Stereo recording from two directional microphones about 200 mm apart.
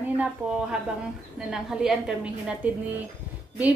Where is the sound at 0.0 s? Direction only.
5° right (ahead or behind).